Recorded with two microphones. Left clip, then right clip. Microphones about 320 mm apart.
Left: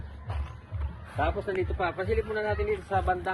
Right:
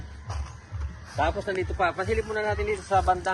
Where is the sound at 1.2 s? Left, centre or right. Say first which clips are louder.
Right 2 dB; right.